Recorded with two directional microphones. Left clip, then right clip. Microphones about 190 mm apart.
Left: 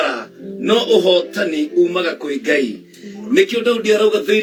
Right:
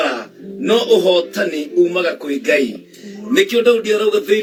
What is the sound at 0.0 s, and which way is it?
A man's voice, 10° left (ahead or behind).